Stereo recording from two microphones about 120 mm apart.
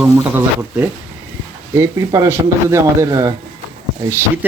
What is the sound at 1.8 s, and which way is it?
Speech, 25° right (ahead or behind).